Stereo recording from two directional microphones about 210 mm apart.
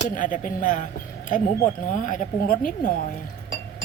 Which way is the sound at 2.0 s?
40° left (ahead or behind).